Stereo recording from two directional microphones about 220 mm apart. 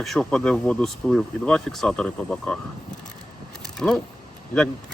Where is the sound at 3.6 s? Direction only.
5° left (ahead or behind).